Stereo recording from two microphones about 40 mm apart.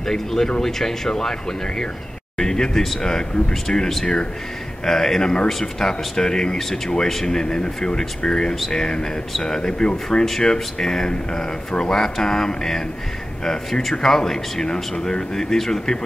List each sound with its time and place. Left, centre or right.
0.0 s speech: centre
2.3 s speech: centre
10.0 s speech: centre